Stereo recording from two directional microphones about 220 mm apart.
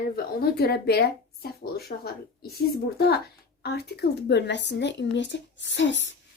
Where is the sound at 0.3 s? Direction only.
45° left (ahead or behind).